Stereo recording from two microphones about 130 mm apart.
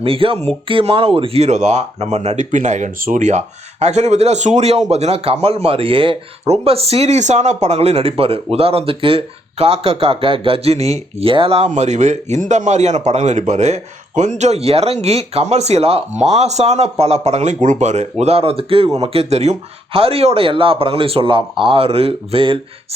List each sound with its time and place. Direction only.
0.0 s speech: 45° right (ahead or behind)